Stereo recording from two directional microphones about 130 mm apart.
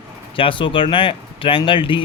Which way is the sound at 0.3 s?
40° left (ahead or behind).